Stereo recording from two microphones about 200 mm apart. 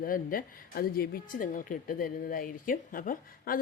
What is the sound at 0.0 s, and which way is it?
A woman's voice, 45° left (ahead or behind).